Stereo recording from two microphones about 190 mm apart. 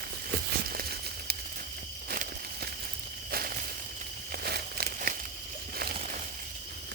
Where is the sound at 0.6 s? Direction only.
55° right (ahead or behind).